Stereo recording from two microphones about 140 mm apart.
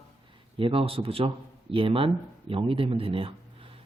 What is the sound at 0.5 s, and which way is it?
Speech, 40° right (ahead or behind).